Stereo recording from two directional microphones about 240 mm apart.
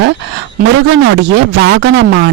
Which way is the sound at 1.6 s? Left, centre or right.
Right.